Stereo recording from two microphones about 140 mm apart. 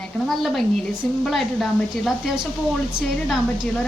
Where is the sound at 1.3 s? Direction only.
Centre (ahead or behind).